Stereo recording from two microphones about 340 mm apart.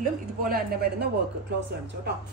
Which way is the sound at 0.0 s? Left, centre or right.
Right.